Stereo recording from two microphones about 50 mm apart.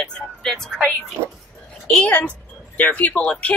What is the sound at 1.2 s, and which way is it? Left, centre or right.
Speech, right.